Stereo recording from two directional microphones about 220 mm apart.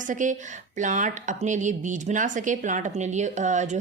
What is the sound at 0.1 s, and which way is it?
Speech, 35° right (ahead or behind).